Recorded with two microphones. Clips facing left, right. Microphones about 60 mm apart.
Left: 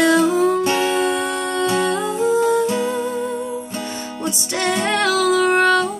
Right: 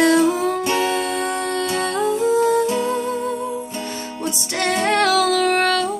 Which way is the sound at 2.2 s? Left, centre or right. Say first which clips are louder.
Left 1 dB; left.